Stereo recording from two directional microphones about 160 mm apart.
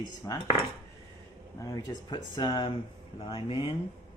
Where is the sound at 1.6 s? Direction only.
20° left (ahead or behind).